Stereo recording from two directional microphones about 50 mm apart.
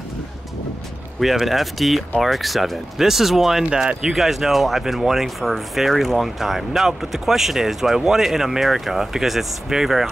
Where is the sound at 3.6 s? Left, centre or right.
Centre.